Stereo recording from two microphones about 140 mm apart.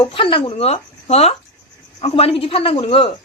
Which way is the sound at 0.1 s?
40° left (ahead or behind).